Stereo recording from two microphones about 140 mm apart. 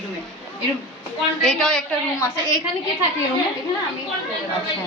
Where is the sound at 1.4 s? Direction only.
5° left (ahead or behind).